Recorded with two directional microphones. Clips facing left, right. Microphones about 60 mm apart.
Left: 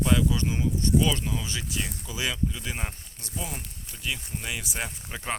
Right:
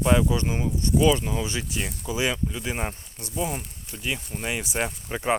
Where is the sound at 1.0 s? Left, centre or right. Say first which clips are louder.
Right 6 dB; right.